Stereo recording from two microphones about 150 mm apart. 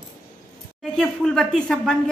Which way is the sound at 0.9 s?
5° left (ahead or behind).